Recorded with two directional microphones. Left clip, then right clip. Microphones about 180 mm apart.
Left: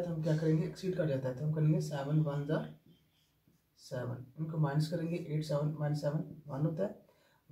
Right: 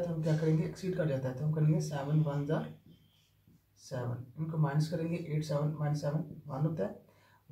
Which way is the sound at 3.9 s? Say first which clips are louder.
Right 1 dB; 5° right (ahead or behind).